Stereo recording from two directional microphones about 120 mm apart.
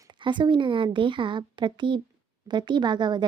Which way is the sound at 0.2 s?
40° right (ahead or behind).